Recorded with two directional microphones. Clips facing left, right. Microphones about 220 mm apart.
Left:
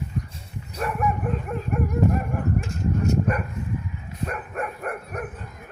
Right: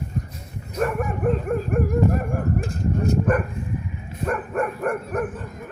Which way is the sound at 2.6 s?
35° right (ahead or behind).